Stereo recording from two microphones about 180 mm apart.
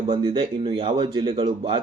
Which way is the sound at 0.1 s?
30° right (ahead or behind).